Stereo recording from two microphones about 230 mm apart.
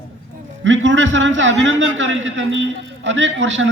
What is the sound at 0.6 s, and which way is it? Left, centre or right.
A woman's voice, right.